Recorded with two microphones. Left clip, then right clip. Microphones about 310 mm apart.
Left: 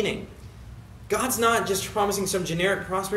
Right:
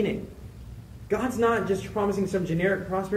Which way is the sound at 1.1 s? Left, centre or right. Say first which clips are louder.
Left 2 dB; left.